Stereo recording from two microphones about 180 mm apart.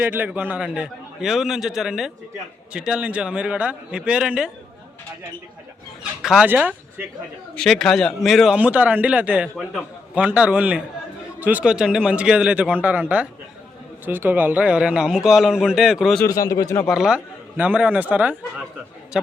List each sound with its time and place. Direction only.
0.0 s a man's voice: 10° right (ahead or behind)
6.0 s speech: 5° right (ahead or behind)
7.5 s a man's voice: centre (ahead or behind)
16.2 s speech: 20° left (ahead or behind)
16.8 s a man's voice: centre (ahead or behind)